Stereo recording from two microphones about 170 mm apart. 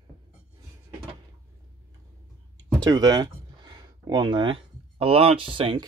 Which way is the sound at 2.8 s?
25° right (ahead or behind).